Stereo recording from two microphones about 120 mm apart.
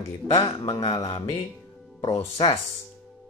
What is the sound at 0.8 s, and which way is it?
Speech, 60° left (ahead or behind).